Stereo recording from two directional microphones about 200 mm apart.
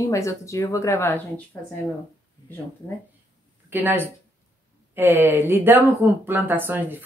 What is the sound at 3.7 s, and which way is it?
Speech, 10° right (ahead or behind).